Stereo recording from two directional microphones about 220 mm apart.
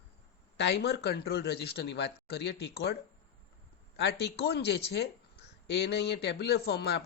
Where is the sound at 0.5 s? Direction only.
50° left (ahead or behind).